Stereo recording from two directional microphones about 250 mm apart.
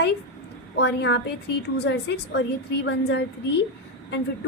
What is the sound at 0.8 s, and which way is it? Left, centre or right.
A woman's voice, left.